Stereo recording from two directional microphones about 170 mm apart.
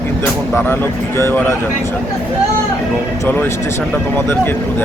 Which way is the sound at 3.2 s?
10° left (ahead or behind).